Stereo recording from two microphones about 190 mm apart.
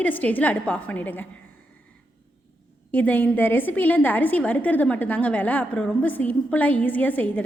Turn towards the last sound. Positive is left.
turn(degrees=10)  # may be behind; listen again after turning